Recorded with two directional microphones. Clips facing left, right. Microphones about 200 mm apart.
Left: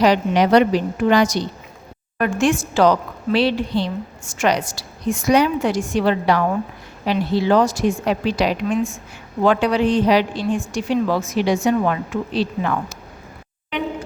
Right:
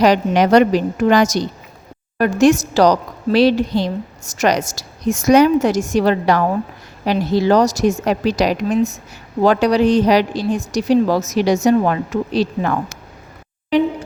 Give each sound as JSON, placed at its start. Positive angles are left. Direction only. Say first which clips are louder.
{"t": 0.0, "sound": "a woman's voice", "louder": "right 2 dB", "side_deg": -45}